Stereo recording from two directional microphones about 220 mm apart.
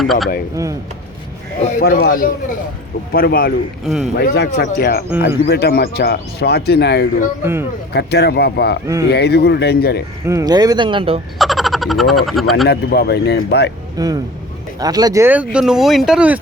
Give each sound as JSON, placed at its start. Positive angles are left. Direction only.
{"t": 0.0, "sound": "speech", "side_deg": 0}
{"t": 0.5, "sound": "speech", "side_deg": -15}
{"t": 1.8, "sound": "speech", "side_deg": 40}
{"t": 3.8, "sound": "speech", "side_deg": 0}
{"t": 4.2, "sound": "speech", "side_deg": 45}
{"t": 10.2, "sound": "speech", "side_deg": -15}
{"t": 11.3, "sound": "speech", "side_deg": 0}
{"t": 12.6, "sound": "speech", "side_deg": 45}
{"t": 13.9, "sound": "speech", "side_deg": -15}